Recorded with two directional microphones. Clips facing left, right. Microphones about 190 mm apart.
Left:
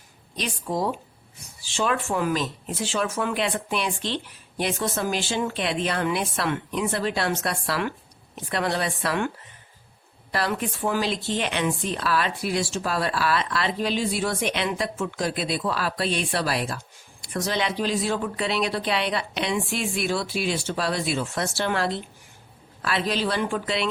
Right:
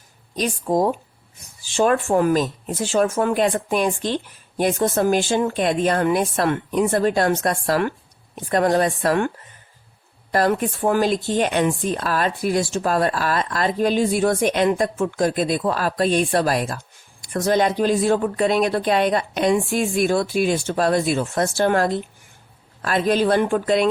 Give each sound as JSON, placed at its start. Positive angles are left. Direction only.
{"t": 0.3, "sound": "speech", "side_deg": -45}
{"t": 10.3, "sound": "speech", "side_deg": -45}